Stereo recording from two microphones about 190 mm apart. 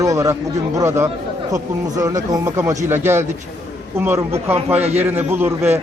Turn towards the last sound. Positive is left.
turn(degrees=-10)  # may be behind; listen again after turning